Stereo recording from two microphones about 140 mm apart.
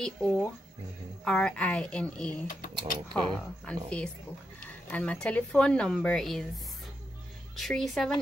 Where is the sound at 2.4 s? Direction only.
80° left.